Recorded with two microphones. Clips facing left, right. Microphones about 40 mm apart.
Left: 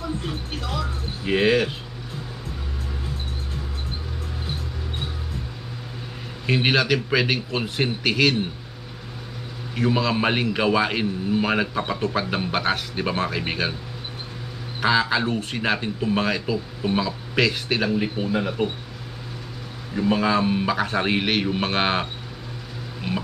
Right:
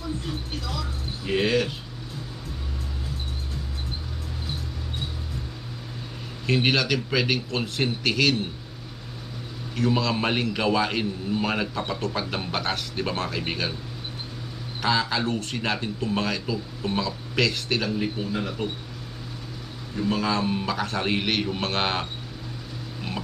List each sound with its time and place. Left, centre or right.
0.0 s music: left
6.4 s a man's voice: centre
9.8 s a man's voice: centre
14.8 s a man's voice: centre
20.0 s a man's voice: centre
23.1 s a man's voice: centre